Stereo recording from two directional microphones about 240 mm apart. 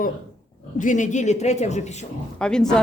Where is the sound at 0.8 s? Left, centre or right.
Left.